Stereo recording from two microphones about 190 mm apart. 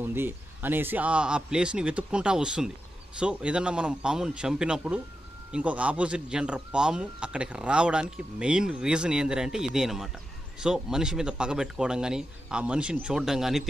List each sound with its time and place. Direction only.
0.0 s speech: 10° right (ahead or behind)